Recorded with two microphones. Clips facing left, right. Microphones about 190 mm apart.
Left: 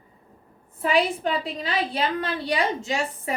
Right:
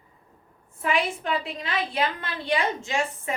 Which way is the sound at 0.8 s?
35° left (ahead or behind).